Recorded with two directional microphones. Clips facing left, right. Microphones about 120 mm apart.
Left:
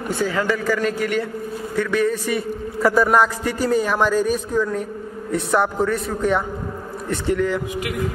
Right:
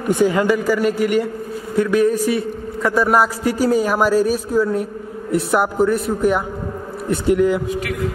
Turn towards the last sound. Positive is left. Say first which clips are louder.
# right 5 dB
turn(degrees=-10)  # may be behind; listen again after turning